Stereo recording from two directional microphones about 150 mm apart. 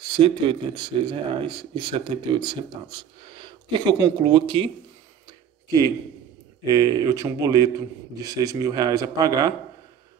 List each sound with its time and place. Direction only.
0.1 s speech: 35° right (ahead or behind)
6.6 s speech: 25° right (ahead or behind)